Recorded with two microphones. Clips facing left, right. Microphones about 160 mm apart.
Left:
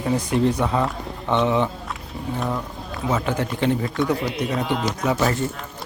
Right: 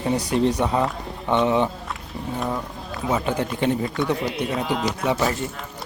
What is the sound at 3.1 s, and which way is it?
Speech, 15° right (ahead or behind).